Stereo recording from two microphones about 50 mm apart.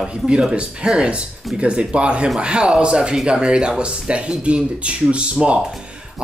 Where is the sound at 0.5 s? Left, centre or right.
Centre.